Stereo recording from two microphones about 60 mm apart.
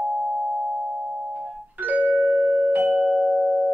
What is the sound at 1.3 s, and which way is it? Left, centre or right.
Music, right.